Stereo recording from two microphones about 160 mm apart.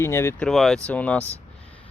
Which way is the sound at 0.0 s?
15° left (ahead or behind).